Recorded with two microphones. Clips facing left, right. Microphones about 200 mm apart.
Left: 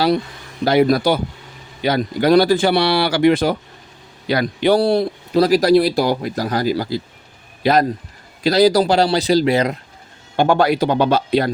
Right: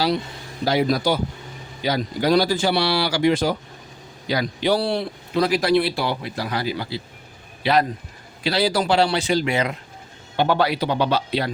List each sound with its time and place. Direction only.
0.6 s a man's voice: 60° left (ahead or behind); by 9.7 s 35° left (ahead or behind)
10.3 s speech: 45° left (ahead or behind)